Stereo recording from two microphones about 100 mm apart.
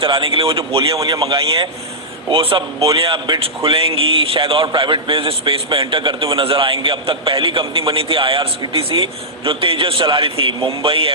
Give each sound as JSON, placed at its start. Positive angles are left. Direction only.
{"t": 0.0, "sound": "a man's voice", "side_deg": -60}
{"t": 0.9, "sound": "a man's voice", "side_deg": -40}